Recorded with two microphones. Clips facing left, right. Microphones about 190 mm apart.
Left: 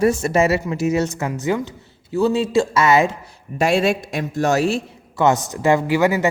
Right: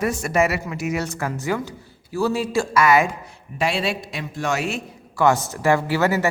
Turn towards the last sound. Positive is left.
turn(degrees=15)  # may be behind; listen again after turning